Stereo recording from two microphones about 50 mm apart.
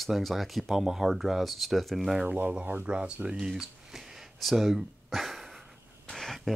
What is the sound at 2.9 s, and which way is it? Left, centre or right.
Speech, right.